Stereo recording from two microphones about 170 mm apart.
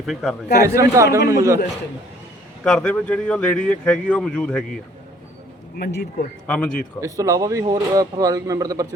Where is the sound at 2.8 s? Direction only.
5° left (ahead or behind).